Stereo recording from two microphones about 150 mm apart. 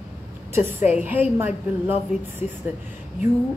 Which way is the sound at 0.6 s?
10° right (ahead or behind).